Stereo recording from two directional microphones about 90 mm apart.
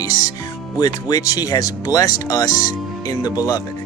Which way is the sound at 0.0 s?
40° left (ahead or behind).